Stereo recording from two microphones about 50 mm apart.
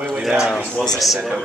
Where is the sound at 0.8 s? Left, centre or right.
Centre.